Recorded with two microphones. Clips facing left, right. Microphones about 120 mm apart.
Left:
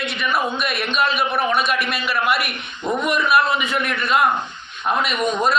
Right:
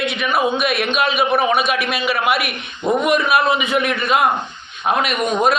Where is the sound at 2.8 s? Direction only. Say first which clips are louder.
Right 4 dB; 20° right (ahead or behind).